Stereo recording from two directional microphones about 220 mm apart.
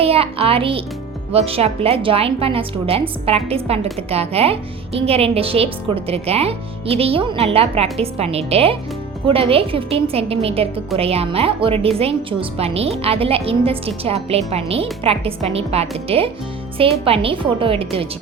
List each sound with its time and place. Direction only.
0.0 s a woman's voice: 25° right (ahead or behind)